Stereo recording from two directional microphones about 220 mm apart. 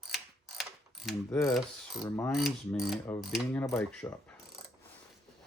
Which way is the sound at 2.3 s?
Centre (ahead or behind).